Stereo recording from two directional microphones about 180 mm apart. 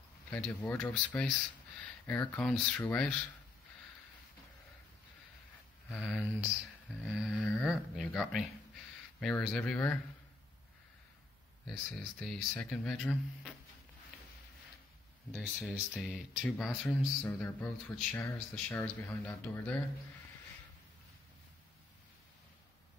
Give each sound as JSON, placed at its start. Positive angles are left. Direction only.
{"t": 0.3, "sound": "speech", "side_deg": 10}
{"t": 5.9, "sound": "speech", "side_deg": 0}
{"t": 11.6, "sound": "speech", "side_deg": 5}
{"t": 15.7, "sound": "speech", "side_deg": 0}